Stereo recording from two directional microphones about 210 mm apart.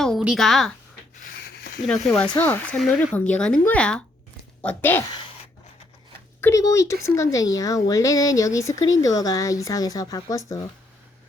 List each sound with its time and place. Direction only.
0.0 s speech: centre (ahead or behind)
1.5 s a sound: 50° left (ahead or behind)
1.9 s a woman's voice: 5° left (ahead or behind)
6.4 s speech: 15° left (ahead or behind)